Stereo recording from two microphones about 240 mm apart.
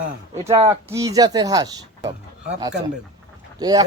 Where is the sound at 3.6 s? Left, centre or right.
Centre.